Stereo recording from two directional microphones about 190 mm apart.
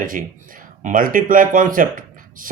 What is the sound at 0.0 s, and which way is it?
Speech, 45° right (ahead or behind).